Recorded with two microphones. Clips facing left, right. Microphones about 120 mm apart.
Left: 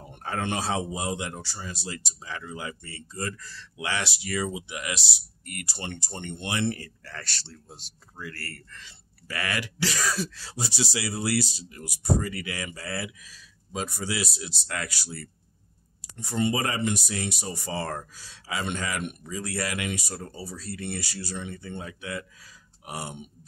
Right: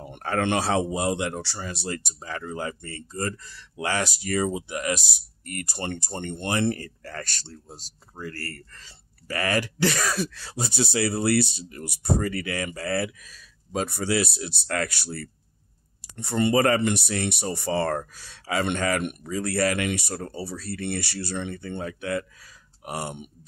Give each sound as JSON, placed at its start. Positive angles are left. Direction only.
{"t": 0.1, "sound": "speech", "side_deg": -75}
{"t": 3.3, "sound": "speech", "side_deg": -20}
{"t": 3.7, "sound": "speech", "side_deg": -45}